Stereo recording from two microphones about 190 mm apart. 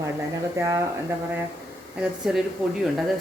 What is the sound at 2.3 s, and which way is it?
Speech, 5° right (ahead or behind).